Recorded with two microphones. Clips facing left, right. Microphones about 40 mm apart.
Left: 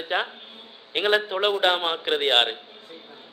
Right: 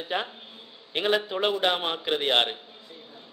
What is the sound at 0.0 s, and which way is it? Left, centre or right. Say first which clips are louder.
A man's voice: left 4 dB; left.